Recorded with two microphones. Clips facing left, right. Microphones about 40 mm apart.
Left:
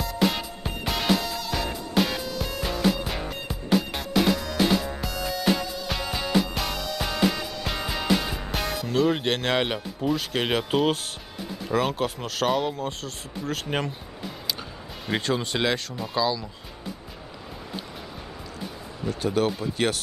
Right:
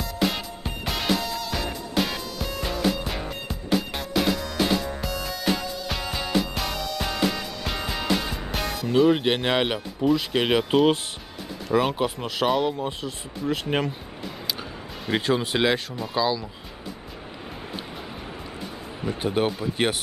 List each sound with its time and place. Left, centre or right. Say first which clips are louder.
0.0 s music: left 1 dB; centre
8.9 s speech: right 4 dB; centre
15.0 s speech: right 3 dB; centre
19.0 s speech: even; right